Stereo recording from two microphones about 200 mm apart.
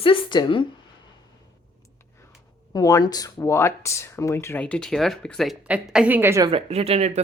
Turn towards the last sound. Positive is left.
turn(degrees=-30)  # may be behind; listen again after turning